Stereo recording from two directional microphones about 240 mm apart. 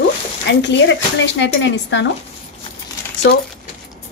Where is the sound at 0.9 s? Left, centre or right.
Left.